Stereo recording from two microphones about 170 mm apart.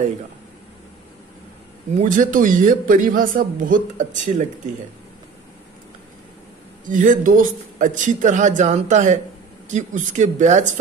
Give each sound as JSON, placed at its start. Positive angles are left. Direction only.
{"t": 2.0, "sound": "speech", "side_deg": -50}
{"t": 6.9, "sound": "speech", "side_deg": -50}